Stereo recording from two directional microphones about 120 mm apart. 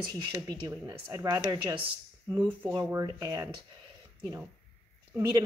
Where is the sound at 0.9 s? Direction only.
25° right (ahead or behind).